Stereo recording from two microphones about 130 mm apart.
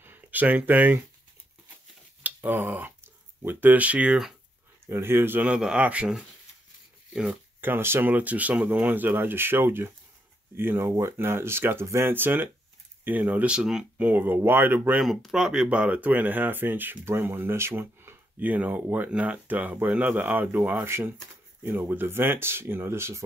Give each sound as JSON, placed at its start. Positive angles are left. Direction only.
{"t": 0.0, "sound": "speech", "side_deg": -15}
{"t": 2.2, "sound": "speech", "side_deg": -15}
{"t": 4.8, "sound": "speech", "side_deg": -20}
{"t": 7.6, "sound": "speech", "side_deg": -15}
{"t": 15.0, "sound": "speech", "side_deg": 0}